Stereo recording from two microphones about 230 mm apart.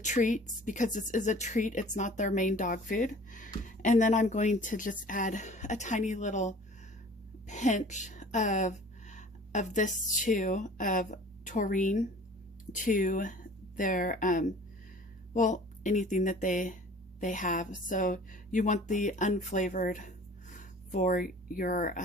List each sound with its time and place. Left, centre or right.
0.0 s a woman's voice: left